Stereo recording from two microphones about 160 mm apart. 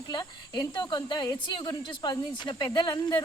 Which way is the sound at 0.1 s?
25° left (ahead or behind).